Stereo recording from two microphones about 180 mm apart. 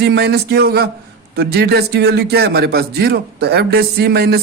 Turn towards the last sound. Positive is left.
turn(degrees=-60)  # may be behind; listen again after turning